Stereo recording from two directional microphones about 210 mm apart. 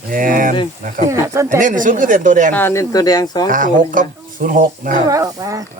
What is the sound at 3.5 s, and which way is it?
A man's voice, 40° right (ahead or behind).